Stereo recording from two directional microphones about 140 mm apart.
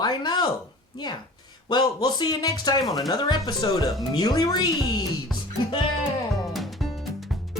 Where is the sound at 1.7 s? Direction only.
30° left (ahead or behind).